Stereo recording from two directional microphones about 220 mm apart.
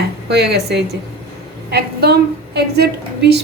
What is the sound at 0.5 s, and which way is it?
A woman's voice, 50° right (ahead or behind).